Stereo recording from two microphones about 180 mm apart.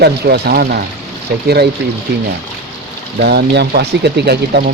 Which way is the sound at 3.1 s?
65° right (ahead or behind).